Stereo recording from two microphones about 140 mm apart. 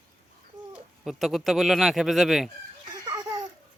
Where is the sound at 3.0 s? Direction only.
30° right (ahead or behind).